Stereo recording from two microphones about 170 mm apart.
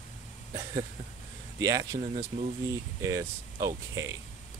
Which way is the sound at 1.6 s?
20° right (ahead or behind).